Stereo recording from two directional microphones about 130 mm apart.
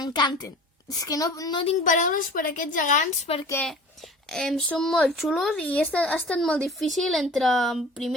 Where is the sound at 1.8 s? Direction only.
85° left.